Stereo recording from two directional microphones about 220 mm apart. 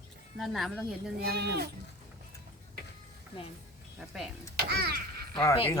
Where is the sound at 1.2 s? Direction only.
45° right (ahead or behind).